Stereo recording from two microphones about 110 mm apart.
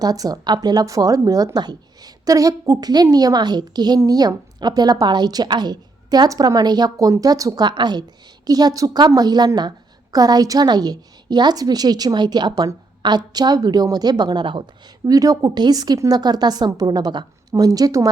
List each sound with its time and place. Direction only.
0.0 s speech: 35° right (ahead or behind)
15.0 s speech: 35° right (ahead or behind)